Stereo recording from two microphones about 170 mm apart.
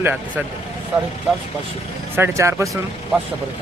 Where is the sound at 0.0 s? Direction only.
10° right (ahead or behind).